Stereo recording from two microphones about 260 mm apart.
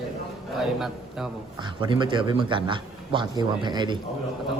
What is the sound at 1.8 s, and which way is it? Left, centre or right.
Speech, centre.